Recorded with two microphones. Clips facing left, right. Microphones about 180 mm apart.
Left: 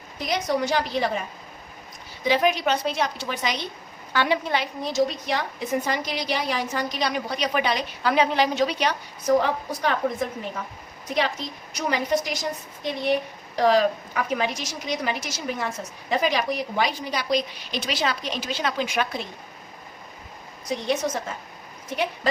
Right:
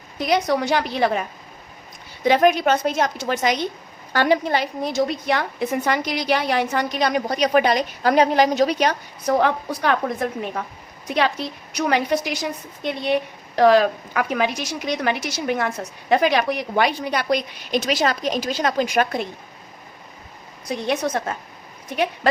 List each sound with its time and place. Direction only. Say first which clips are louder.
0.2 s a woman's voice: right 5 dB; 65° right (ahead or behind)
2.2 s a woman's voice: right 5 dB; 50° right (ahead or behind)
9.2 s a woman's voice: right 2 dB; 65° right (ahead or behind); by 19.2 s 45° right (ahead or behind)
20.7 s a woman's voice: right 2 dB; 60° right (ahead or behind)